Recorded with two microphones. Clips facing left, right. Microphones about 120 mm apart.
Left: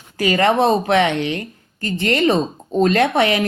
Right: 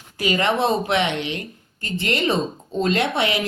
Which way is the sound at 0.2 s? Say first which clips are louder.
Left 5 dB; 50° left (ahead or behind).